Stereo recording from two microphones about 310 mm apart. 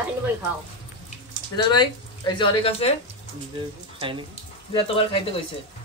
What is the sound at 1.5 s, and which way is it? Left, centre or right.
Speech, centre.